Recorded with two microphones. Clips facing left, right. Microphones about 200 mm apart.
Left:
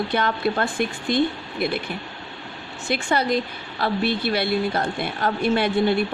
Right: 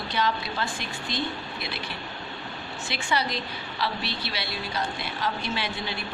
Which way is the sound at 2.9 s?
50° left (ahead or behind).